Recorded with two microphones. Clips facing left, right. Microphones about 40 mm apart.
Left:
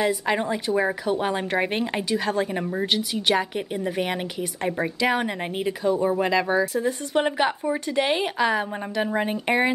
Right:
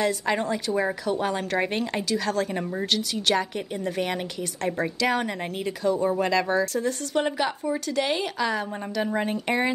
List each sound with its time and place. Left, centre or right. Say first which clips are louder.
0.0 s speech: left 1 dB; centre